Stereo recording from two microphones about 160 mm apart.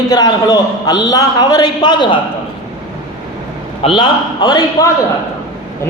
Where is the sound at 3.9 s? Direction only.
25° left (ahead or behind).